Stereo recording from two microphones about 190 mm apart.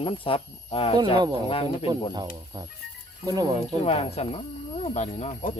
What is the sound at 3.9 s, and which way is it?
Speech, 30° left (ahead or behind).